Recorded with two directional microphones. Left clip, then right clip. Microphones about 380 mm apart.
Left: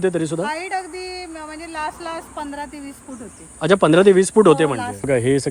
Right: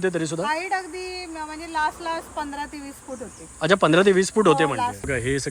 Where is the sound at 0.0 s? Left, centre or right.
Centre.